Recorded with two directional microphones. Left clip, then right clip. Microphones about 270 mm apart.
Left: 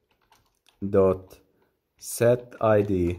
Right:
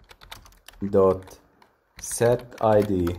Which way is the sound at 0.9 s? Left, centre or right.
Left.